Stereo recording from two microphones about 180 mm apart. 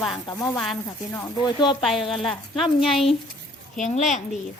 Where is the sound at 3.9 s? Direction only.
40° left (ahead or behind).